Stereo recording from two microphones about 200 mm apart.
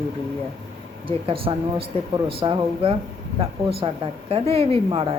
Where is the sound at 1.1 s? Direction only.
25° right (ahead or behind).